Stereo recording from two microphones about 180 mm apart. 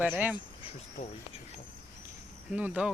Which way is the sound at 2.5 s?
10° right (ahead or behind).